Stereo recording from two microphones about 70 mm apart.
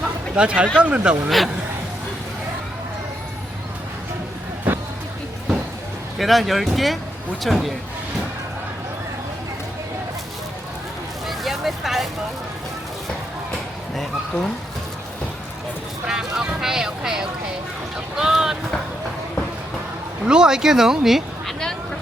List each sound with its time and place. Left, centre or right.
0.3 s speech: centre
4.7 s vehicle: right
6.1 s speech: centre
11.3 s vehicle: centre
13.9 s a sound: centre
16.0 s speech: centre
20.2 s speech: centre